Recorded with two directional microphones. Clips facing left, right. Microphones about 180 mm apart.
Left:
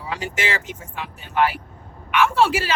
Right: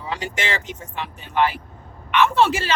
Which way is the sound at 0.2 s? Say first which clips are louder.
Left 1 dB; 5° left (ahead or behind).